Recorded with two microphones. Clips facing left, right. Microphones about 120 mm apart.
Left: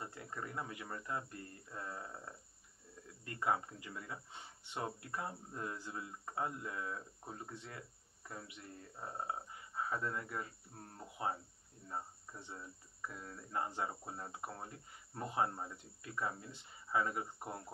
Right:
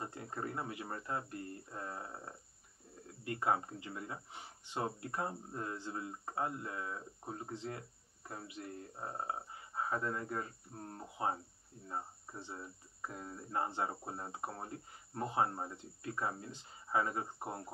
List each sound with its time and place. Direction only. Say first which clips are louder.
0.0 s speech: right 4 dB; 30° right (ahead or behind)